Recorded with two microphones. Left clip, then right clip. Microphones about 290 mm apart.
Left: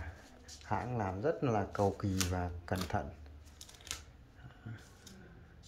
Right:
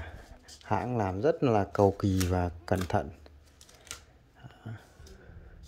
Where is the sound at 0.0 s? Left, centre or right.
Right.